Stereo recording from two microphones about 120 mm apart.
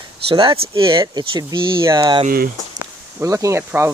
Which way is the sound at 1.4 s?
30° right (ahead or behind).